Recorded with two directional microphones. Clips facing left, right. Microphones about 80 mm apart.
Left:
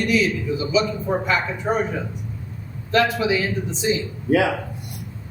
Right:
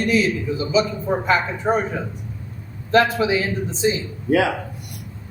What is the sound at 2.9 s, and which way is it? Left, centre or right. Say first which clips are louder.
Speech: right 2 dB; right.